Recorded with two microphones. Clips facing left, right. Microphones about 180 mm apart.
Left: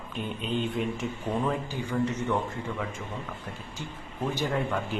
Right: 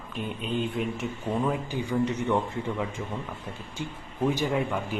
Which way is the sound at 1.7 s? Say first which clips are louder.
Right 2 dB; 15° right (ahead or behind).